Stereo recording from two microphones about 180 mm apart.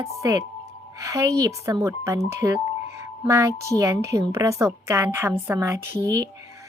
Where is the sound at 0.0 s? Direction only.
20° right (ahead or behind).